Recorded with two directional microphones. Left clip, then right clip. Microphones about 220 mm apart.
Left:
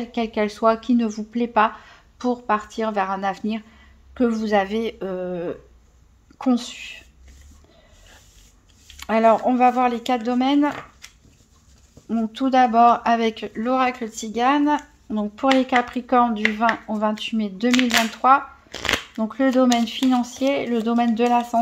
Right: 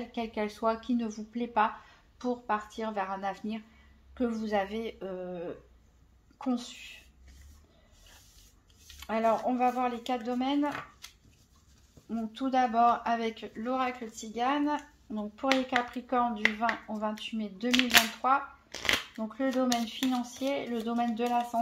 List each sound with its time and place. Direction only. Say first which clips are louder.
0.0 s speech: left 11 dB; 40° left (ahead or behind)
9.0 s speech: left 11 dB; 45° left (ahead or behind)
12.1 s speech: left 11 dB; 45° left (ahead or behind)
17.6 s speech: left 8 dB; 20° left (ahead or behind)
18.1 s speech: left 11 dB; 45° left (ahead or behind)
18.7 s speech: left 6 dB; 30° left (ahead or behind)
19.1 s speech: left 11 dB; 50° left (ahead or behind)